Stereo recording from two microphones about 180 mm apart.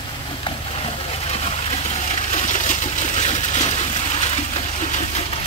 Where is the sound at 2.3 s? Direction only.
45° left (ahead or behind).